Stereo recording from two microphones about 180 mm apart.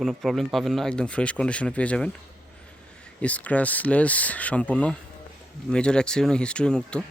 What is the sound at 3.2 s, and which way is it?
Speech, 10° left (ahead or behind).